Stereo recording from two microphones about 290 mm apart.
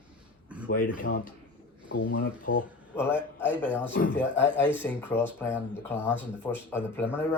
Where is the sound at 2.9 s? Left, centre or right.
Centre.